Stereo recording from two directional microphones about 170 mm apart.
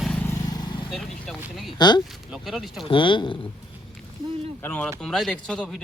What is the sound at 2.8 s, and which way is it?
Speech, 30° left (ahead or behind).